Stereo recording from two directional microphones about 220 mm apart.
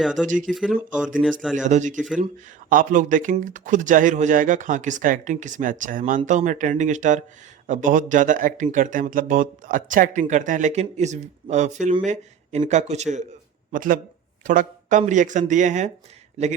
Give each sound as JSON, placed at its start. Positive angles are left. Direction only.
{"t": 0.0, "sound": "speech", "side_deg": 0}
{"t": 1.6, "sound": "speech", "side_deg": -35}